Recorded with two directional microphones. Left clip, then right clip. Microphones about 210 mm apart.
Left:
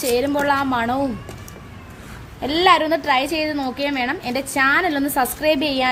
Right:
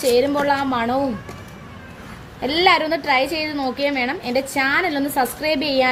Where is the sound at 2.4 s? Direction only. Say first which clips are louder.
Left 1 dB; 40° left (ahead or behind).